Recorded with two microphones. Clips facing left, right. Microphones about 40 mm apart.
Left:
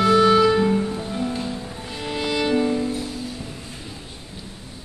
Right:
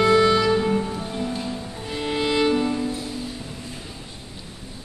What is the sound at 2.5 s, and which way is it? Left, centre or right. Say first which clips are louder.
Music: left 2 dB; centre.